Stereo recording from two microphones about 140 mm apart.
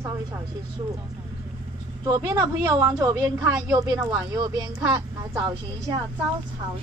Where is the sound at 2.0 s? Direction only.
30° right (ahead or behind).